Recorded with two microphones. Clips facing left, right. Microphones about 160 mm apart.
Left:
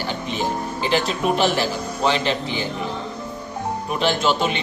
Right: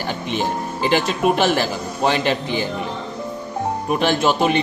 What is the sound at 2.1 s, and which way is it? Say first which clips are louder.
Speech: right 2 dB; 50° right (ahead or behind).